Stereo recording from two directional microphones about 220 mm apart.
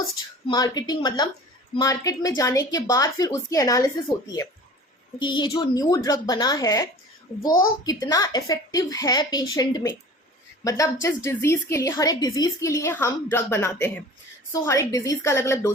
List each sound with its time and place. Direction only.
0.4 s a woman's voice: 20° left (ahead or behind)